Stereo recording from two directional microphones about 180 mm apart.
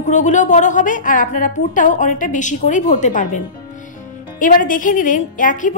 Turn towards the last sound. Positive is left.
turn(degrees=45)  # may be behind; listen again after turning